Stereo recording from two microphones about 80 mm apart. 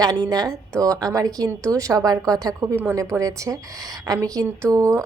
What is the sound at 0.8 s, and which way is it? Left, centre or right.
A woman's voice, right.